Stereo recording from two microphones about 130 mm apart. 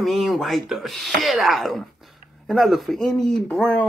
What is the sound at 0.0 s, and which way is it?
A man's voice, centre (ahead or behind).